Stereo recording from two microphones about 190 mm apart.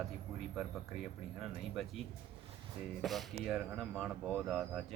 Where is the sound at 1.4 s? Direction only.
Centre (ahead or behind).